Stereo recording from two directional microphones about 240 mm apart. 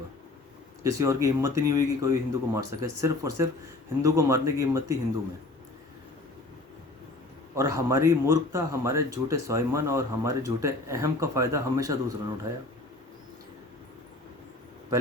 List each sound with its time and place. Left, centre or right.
0.8 s speech: centre
7.5 s speech: centre